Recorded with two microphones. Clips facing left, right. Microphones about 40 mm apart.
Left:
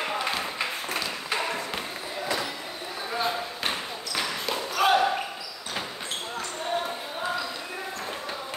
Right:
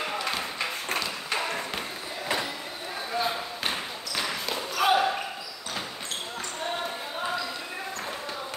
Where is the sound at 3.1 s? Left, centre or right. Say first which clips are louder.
Left 1 dB; centre.